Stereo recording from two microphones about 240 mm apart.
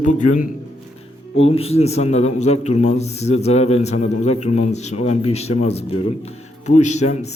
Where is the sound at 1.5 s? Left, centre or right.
Left.